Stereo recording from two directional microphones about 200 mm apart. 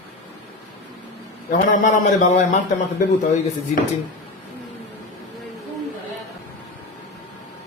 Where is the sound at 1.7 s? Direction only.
40° left (ahead or behind).